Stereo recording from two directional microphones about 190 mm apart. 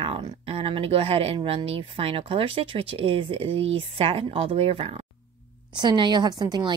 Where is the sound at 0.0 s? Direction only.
30° right (ahead or behind).